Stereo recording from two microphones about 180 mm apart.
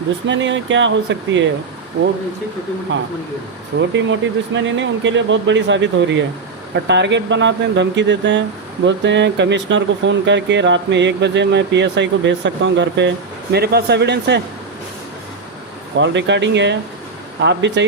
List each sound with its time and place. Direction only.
0.3 s speech: 90° right
3.8 s speech: 90° right
6.7 s speech: 75° right (ahead or behind)
16.0 s speech: 85° right